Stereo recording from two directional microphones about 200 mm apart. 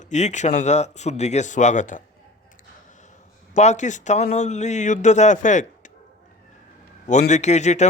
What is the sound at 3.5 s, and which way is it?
Speech, 35° left (ahead or behind).